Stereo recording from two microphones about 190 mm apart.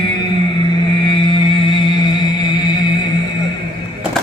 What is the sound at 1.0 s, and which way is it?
Music, 25° left (ahead or behind).